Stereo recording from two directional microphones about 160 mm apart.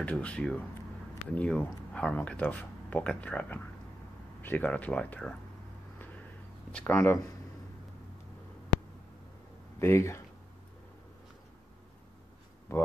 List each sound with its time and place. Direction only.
0.0 s speech: 10° left (ahead or behind)
6.7 s speech: 10° left (ahead or behind)
9.8 s speech: 15° left (ahead or behind)
12.7 s speech: 20° left (ahead or behind)